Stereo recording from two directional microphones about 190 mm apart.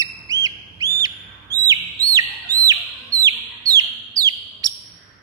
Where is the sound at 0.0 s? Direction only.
20° right (ahead or behind).